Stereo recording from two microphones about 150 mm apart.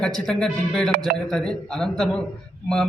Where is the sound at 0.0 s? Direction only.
5° left (ahead or behind).